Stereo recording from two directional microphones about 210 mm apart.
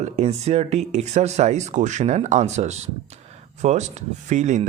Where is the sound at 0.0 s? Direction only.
30° right (ahead or behind).